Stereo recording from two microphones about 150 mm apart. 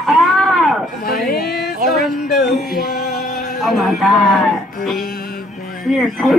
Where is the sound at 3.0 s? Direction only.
55° left (ahead or behind).